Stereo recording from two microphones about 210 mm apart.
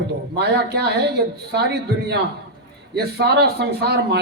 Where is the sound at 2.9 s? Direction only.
50° right (ahead or behind).